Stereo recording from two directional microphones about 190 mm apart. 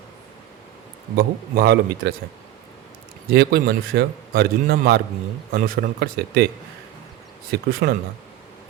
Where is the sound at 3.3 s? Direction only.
55° right (ahead or behind).